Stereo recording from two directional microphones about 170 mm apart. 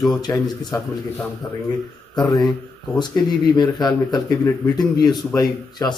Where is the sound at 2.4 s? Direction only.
Centre (ahead or behind).